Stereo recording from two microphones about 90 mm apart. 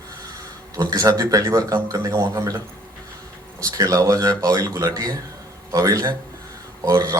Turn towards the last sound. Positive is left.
turn(degrees=-40)  # may be behind; listen again after turning